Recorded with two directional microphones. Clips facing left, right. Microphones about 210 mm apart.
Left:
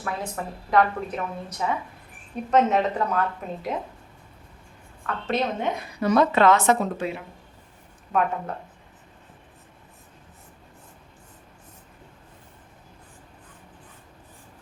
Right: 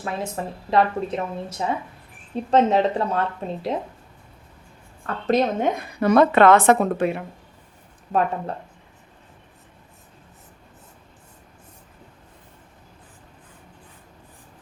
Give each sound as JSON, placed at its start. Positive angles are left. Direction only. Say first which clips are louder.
{"t": 0.0, "sound": "a woman's voice", "louder": "right 3 dB", "side_deg": -25}
{"t": 5.0, "sound": "a woman's voice", "louder": "right 5 dB", "side_deg": -40}
{"t": 6.0, "sound": "a woman's voice", "louder": "right 4 dB", "side_deg": -55}